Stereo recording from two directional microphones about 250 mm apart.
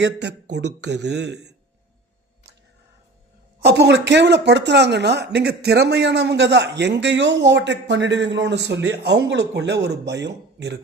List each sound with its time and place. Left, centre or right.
0.0 s speech: right
3.6 s speech: right